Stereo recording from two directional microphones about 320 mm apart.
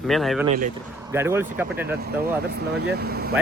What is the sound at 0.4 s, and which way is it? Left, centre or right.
Speech, right.